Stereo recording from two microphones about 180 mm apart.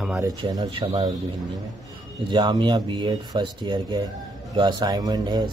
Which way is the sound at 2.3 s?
25° right (ahead or behind).